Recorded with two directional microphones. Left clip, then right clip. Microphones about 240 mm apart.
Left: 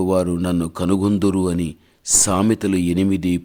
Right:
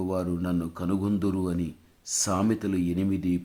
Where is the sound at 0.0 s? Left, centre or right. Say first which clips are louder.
Left 11 dB; left.